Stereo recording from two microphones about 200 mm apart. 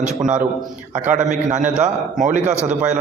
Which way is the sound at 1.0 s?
35° right (ahead or behind).